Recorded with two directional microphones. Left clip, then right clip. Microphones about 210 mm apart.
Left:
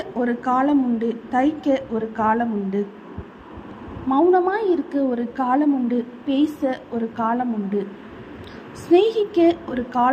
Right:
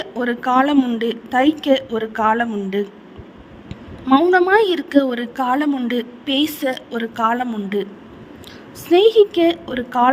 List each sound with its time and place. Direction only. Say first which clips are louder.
0.2 s a woman's voice: right 4 dB; 45° right (ahead or behind)
4.1 s a woman's voice: right 4 dB; 50° right (ahead or behind)
8.9 s a woman's voice: right 5 dB; 45° right (ahead or behind)